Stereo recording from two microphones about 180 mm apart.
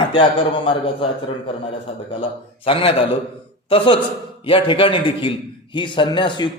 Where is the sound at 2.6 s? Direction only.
30° left (ahead or behind).